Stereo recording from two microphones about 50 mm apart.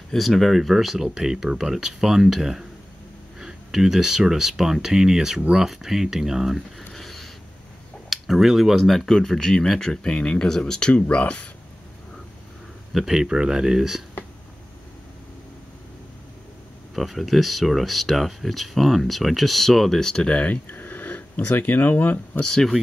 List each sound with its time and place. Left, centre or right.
0.1 s speech: centre
6.9 s a sound: centre
8.1 s speech: centre
10.0 s speech: left
11.1 s speech: left
12.9 s speech: centre
16.9 s speech: centre
20.2 s speech: left
20.6 s speech: left
22.4 s speech: centre